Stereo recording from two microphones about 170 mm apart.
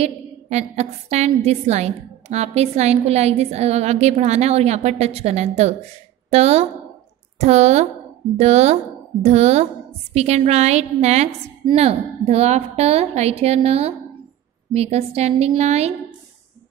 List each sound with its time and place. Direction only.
0.0 s a woman's voice: 40° right (ahead or behind)